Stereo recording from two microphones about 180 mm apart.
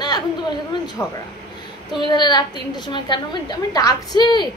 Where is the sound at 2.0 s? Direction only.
25° left (ahead or behind).